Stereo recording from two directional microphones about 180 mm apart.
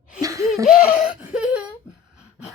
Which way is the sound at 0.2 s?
20° right (ahead or behind).